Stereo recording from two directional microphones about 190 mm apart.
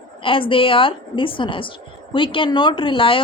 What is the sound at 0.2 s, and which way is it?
Speech, 25° left (ahead or behind).